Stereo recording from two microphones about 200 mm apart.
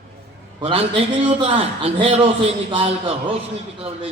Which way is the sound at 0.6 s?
30° right (ahead or behind).